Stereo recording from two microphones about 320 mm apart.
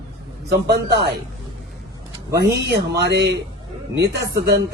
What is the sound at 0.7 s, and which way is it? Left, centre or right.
Speech, right.